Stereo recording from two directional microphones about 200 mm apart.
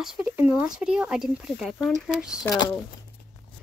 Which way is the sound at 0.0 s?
5° right (ahead or behind).